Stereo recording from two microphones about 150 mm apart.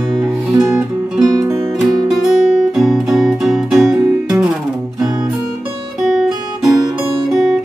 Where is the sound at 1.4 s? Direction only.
25° right (ahead or behind).